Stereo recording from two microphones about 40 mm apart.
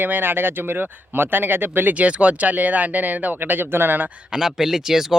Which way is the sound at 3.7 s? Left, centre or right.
Right.